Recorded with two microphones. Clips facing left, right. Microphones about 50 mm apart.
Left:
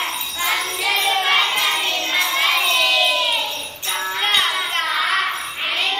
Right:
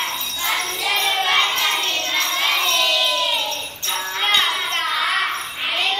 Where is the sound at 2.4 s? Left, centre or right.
Centre.